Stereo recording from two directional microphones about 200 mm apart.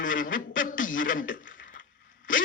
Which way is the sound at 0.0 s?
40° left (ahead or behind).